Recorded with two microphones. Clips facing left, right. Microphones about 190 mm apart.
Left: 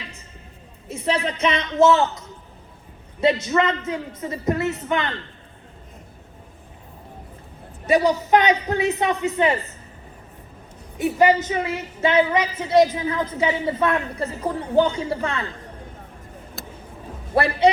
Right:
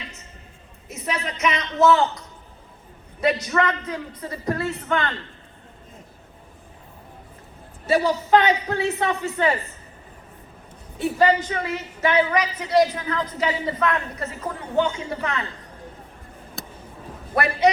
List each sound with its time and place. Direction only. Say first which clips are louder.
0.9 s a woman's voice: left 5 dB; 30° left (ahead or behind)
7.9 s a man's voice: left 1 dB; 20° left (ahead or behind)
10.9 s a woman's voice: left 2 dB; 20° left (ahead or behind)
17.3 s a woman's voice: left 2 dB; 30° left (ahead or behind)